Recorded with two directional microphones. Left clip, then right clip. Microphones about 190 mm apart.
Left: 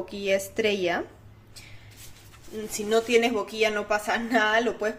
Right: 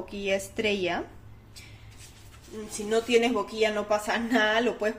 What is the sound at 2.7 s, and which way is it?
Speech, 30° left (ahead or behind).